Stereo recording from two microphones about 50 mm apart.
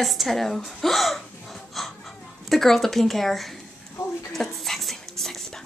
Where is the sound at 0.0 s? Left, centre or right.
Centre.